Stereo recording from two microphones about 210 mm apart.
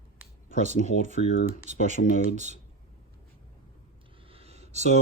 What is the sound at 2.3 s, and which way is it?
Speech, 35° right (ahead or behind).